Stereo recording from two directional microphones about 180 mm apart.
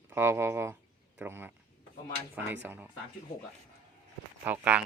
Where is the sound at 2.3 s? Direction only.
10° right (ahead or behind).